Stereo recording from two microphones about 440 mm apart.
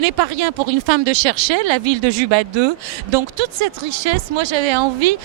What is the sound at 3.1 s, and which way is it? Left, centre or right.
Speech, right.